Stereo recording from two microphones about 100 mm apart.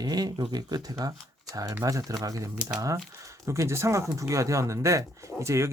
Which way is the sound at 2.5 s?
10° right (ahead or behind).